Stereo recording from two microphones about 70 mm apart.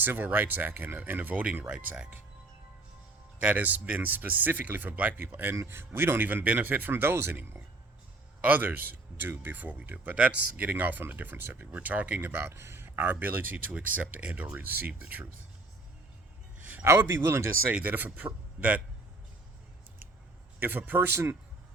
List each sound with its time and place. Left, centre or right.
0.0 s speech: right
3.4 s speech: right
12.3 s speech: right
16.8 s speech: right; by 18.7 s centre
20.6 s speech: right